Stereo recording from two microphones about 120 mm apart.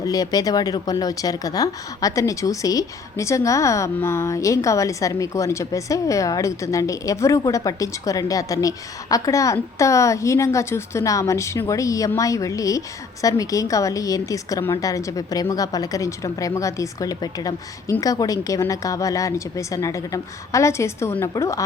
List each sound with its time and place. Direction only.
0.0 s speech: 30° left (ahead or behind)